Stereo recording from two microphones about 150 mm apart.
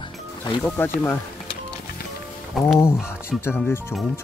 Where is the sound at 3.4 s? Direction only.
15° left (ahead or behind).